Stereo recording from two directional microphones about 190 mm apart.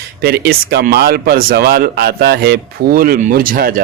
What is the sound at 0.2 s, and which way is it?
Speech, 55° right (ahead or behind).